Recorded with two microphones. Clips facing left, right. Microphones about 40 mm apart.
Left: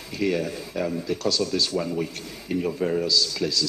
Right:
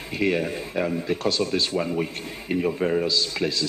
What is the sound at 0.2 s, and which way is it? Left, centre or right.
A man's voice, right.